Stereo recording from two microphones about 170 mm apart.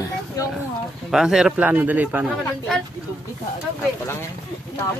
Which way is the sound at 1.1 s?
5° right (ahead or behind).